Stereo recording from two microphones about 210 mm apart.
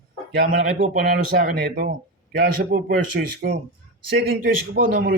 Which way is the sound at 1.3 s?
45° right (ahead or behind).